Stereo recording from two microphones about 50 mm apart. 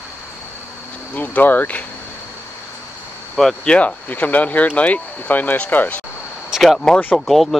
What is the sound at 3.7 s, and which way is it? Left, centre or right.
Speech, left.